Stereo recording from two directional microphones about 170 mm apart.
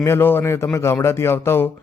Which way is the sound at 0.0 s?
15° left (ahead or behind).